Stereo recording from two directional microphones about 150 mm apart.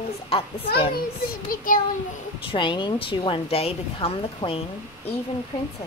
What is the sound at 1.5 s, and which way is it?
Speech, 65° left (ahead or behind).